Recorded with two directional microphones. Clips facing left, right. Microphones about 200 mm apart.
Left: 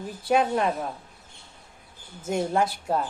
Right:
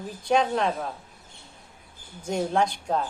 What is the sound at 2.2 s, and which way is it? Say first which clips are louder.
Speech: even; 5° left (ahead or behind).